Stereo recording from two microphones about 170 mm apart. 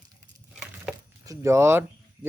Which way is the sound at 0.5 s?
5° right (ahead or behind).